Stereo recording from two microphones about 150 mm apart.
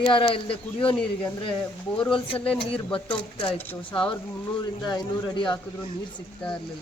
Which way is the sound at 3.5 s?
10° left (ahead or behind).